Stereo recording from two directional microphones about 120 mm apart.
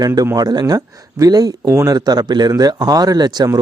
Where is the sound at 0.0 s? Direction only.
30° right (ahead or behind).